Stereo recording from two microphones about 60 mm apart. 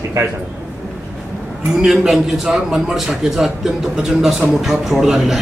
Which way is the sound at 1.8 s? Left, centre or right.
Centre.